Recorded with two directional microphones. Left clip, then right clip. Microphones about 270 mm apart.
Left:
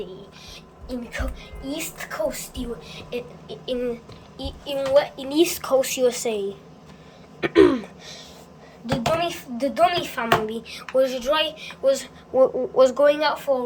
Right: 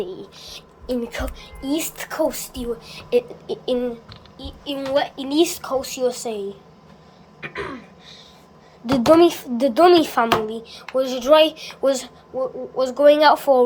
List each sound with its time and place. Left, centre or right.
0.0 s a woman's voice: right
4.4 s a woman's voice: centre
7.4 s a sound: left
9.1 s a woman's voice: right
10.5 s speech: centre
12.4 s a woman's voice: centre